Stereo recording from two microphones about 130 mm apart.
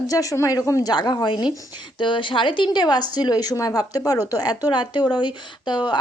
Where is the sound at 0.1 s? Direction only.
25° left (ahead or behind).